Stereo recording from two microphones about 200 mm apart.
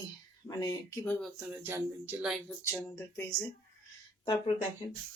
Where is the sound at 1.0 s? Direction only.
10° left (ahead or behind).